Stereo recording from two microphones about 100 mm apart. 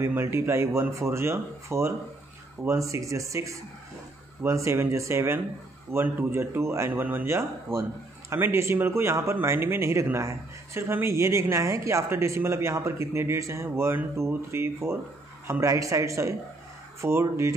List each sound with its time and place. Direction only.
0.0 s a woman's voice: 25° right (ahead or behind)